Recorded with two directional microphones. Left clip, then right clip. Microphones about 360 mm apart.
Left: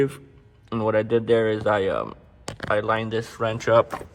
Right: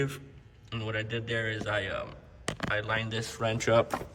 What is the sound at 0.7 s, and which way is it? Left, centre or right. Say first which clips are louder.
Speech: left 13 dB; centre.